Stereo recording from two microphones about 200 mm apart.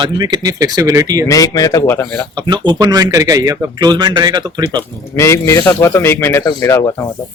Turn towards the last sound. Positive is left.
turn(degrees=10)  # may be behind; listen again after turning